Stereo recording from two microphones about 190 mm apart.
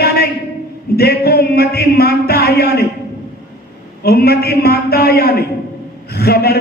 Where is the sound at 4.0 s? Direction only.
55° left (ahead or behind).